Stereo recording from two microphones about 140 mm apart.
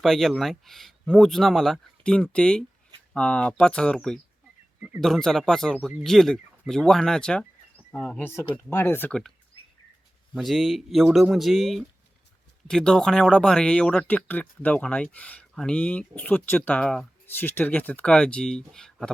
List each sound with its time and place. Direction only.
0.0 s speech: centre (ahead or behind)
8.7 s speech: 15° left (ahead or behind)
10.3 s speech: centre (ahead or behind)